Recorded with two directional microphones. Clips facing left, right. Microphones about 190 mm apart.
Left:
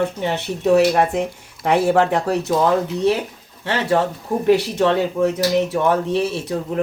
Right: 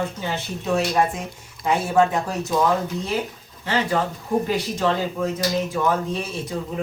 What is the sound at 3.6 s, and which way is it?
Speech, 70° left (ahead or behind).